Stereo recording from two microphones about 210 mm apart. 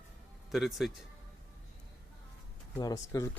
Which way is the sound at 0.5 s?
Centre (ahead or behind).